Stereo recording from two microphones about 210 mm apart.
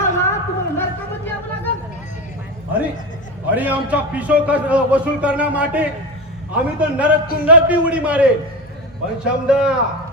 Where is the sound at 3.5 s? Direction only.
10° right (ahead or behind).